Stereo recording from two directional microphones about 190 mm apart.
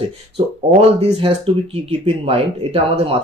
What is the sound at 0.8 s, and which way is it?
Speech, 35° right (ahead or behind).